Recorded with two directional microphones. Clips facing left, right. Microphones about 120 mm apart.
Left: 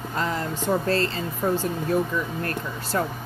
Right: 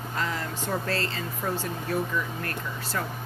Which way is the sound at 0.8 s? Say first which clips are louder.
Left 6 dB; 30° left (ahead or behind).